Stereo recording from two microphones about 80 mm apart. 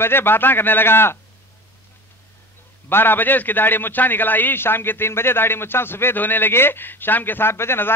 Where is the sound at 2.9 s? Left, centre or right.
Left.